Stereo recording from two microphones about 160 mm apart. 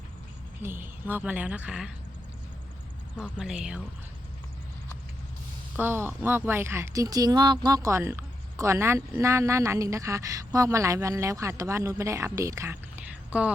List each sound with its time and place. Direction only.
0.6 s a woman's voice: 15° right (ahead or behind)
3.2 s speech: 5° right (ahead or behind)
5.7 s speech: 15° right (ahead or behind)